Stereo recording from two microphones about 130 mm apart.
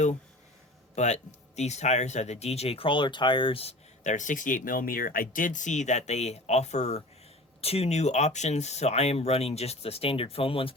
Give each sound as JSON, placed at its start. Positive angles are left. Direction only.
{"t": 0.9, "sound": "speech", "side_deg": 60}
{"t": 4.0, "sound": "speech", "side_deg": 70}